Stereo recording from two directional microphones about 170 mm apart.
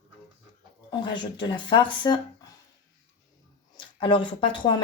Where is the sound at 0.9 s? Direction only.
25° left (ahead or behind).